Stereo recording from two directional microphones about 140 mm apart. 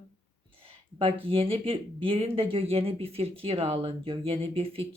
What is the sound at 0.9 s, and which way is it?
Speech, 40° right (ahead or behind).